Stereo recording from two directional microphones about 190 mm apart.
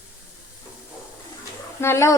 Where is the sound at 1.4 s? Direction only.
15° left (ahead or behind).